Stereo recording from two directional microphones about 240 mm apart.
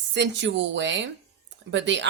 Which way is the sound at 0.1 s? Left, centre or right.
Right.